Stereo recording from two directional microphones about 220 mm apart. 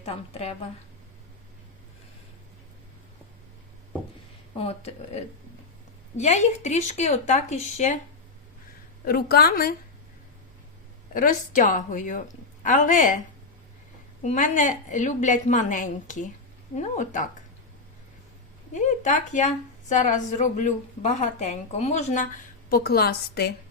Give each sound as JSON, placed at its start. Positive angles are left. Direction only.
{"t": 0.0, "sound": "speech", "side_deg": 25}
{"t": 4.5, "sound": "a woman's voice", "side_deg": 30}
{"t": 9.0, "sound": "a woman's voice", "side_deg": 45}
{"t": 11.1, "sound": "a woman's voice", "side_deg": 35}
{"t": 14.3, "sound": "a woman's voice", "side_deg": 35}
{"t": 18.7, "sound": "a woman's voice", "side_deg": 35}